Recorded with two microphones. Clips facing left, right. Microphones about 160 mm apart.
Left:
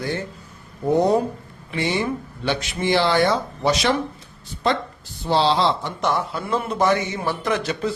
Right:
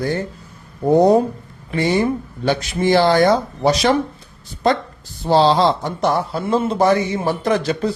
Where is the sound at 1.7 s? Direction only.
45° right (ahead or behind).